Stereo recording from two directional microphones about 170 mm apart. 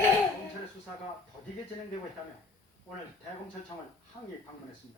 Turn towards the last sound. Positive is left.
turn(degrees=25)  # may be behind; listen again after turning